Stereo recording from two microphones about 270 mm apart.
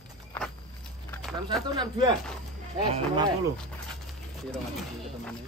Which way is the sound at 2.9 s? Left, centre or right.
Centre.